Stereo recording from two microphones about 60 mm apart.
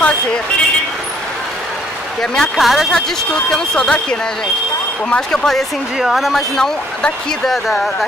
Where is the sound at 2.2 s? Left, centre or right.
Centre.